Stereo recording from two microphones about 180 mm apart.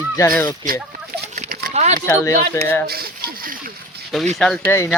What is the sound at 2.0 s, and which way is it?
Speech, 15° left (ahead or behind).